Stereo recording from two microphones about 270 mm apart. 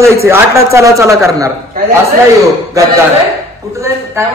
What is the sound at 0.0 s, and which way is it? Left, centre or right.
A man's voice, centre.